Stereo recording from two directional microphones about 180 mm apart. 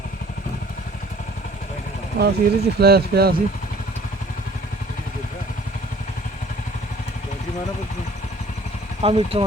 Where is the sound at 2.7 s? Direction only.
60° right (ahead or behind).